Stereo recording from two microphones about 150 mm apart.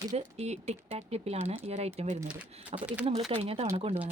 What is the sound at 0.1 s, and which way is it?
Speech, 45° right (ahead or behind).